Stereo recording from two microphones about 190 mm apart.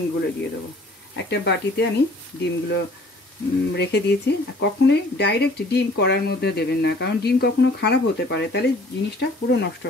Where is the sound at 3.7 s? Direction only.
65° left (ahead or behind).